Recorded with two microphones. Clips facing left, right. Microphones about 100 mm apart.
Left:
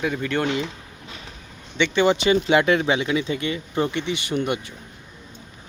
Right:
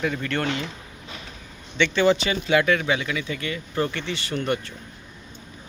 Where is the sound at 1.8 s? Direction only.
20° left (ahead or behind).